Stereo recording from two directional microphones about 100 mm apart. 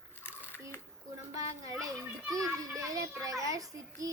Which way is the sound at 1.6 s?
35° right (ahead or behind).